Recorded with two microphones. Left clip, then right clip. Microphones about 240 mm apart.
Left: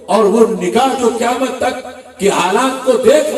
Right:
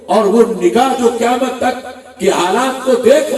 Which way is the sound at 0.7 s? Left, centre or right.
Left.